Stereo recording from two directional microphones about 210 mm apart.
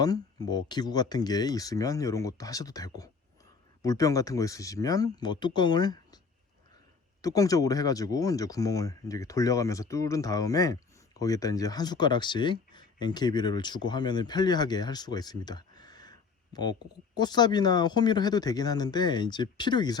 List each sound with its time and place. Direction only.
0.0 s speech: 20° left (ahead or behind)
7.2 s speech: 15° left (ahead or behind)